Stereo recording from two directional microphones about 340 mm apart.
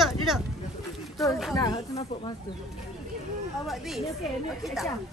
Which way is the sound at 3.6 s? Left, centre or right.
Centre.